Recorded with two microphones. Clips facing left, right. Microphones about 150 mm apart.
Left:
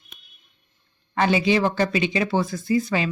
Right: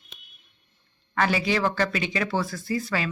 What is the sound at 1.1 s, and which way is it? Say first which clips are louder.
Speech: left 4 dB; 20° left (ahead or behind).